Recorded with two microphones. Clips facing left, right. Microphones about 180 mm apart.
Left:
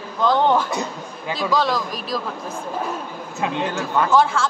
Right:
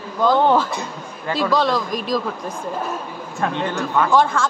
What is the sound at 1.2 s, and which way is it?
Speech, 10° left (ahead or behind).